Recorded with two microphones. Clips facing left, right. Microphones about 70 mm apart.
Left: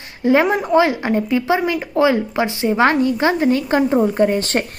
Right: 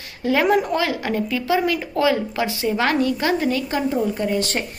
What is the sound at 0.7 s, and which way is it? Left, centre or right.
A woman's voice, left.